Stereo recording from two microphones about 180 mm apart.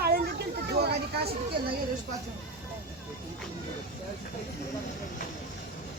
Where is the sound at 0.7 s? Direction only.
65° right (ahead or behind).